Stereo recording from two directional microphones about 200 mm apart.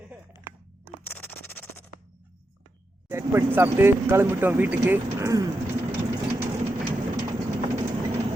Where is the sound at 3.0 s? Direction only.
10° right (ahead or behind).